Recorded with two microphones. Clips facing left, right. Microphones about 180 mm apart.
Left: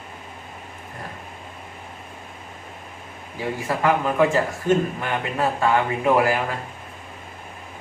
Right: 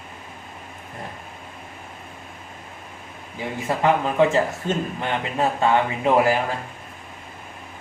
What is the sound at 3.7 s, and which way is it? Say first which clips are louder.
Speech: right 1 dB; 25° right (ahead or behind).